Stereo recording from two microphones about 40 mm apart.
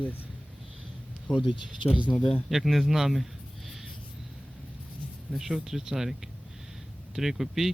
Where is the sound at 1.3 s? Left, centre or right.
Centre.